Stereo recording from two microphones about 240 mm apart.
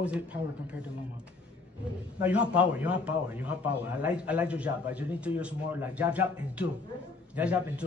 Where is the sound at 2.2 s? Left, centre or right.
Centre.